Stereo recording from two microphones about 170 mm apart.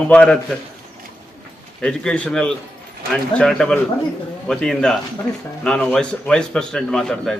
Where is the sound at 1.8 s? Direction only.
5° left (ahead or behind).